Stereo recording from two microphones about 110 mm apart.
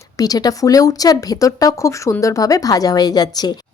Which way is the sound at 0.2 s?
35° left (ahead or behind).